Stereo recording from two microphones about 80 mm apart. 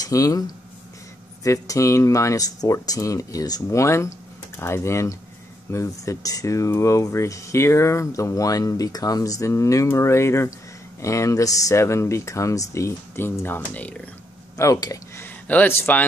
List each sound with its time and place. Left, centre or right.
0.0 s speech: left
3.8 s speech: left; by 14.0 s centre
14.6 s speech: left
15.2 s a sound: centre
15.7 s speech: left